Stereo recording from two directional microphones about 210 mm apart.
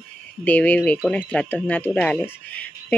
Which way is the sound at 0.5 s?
10° left (ahead or behind).